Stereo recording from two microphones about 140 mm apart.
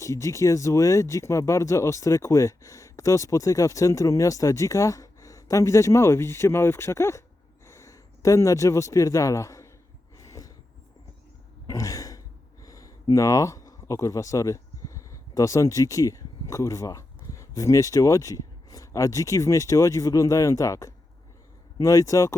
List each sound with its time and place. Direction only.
0.0 s speech: 20° left (ahead or behind)
10.2 s a sound: 25° left (ahead or behind)
11.6 s throat clearing: 25° left (ahead or behind)
12.6 s speech: 25° left (ahead or behind)